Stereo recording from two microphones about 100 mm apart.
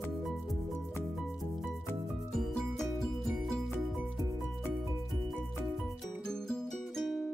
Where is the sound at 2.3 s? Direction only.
5° left (ahead or behind).